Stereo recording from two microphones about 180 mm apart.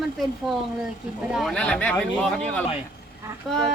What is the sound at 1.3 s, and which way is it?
Speech, centre (ahead or behind).